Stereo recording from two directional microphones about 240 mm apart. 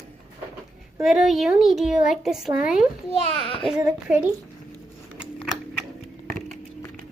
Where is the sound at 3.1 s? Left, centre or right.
Left.